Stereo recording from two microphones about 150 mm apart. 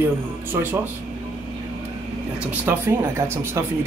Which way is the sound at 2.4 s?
10° right (ahead or behind).